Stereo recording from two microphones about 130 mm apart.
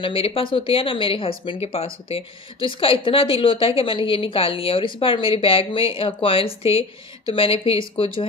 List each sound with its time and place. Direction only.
0.0 s speech: 45° left (ahead or behind)